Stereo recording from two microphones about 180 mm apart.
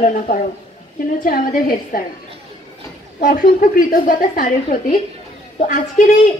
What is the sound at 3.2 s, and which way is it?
A woman's voice, 50° left (ahead or behind).